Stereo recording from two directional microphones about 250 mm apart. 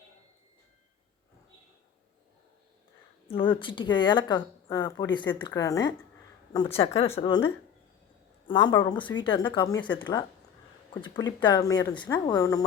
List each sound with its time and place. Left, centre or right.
3.2 s speech: left